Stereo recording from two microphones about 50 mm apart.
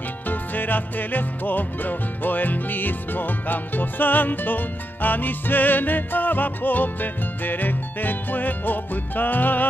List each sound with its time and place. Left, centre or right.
0.3 s music: left